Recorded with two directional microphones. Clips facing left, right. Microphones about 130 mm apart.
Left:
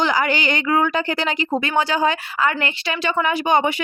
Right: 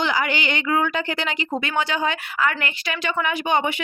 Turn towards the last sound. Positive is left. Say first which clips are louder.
# left 4 dB
turn(degrees=40)  # may be behind; listen again after turning